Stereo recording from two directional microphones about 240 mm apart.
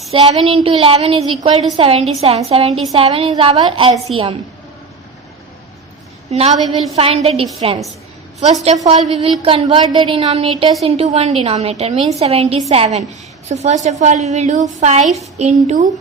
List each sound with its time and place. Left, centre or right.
0.1 s a woman's voice: right
6.3 s a woman's voice: right
6.6 s a woman's voice: centre
6.9 s a woman's voice: right
8.8 s a woman's voice: right